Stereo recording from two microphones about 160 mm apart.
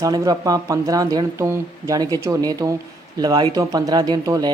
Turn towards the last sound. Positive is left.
turn(degrees=-25)  # may be behind; listen again after turning